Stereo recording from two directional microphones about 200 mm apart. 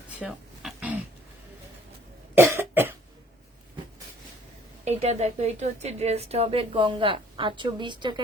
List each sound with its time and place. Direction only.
0.1 s a sound: 5° right (ahead or behind)
2.3 s cough: 10° right (ahead or behind)
4.9 s a woman's voice: 30° right (ahead or behind)